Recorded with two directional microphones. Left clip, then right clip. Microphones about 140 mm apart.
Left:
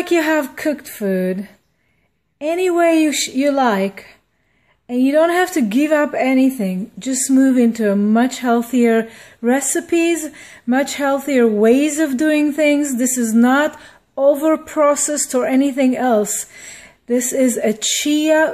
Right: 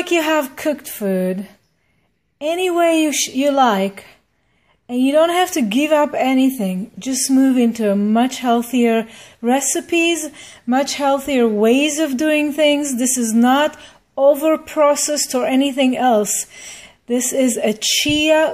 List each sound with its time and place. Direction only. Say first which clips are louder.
0.0 s a woman's voice: even; 15° left (ahead or behind)